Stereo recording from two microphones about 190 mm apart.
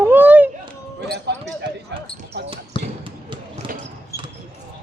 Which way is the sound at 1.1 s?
65° right (ahead or behind).